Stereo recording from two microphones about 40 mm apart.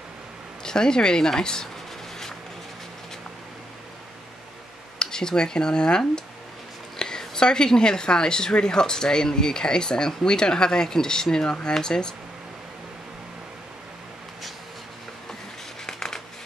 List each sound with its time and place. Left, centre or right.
0.7 s a woman's voice: centre
4.9 s a woman's voice: centre
15.9 s a sound: centre